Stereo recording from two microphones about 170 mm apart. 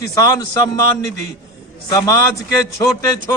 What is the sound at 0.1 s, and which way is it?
Speech, 20° left (ahead or behind).